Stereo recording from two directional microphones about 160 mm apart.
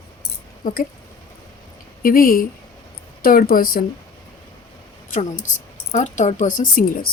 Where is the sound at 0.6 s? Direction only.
55° left (ahead or behind).